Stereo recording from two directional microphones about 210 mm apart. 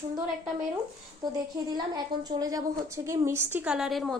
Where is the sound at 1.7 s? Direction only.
20° right (ahead or behind).